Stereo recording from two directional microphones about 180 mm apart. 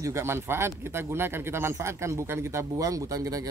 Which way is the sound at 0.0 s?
15° right (ahead or behind).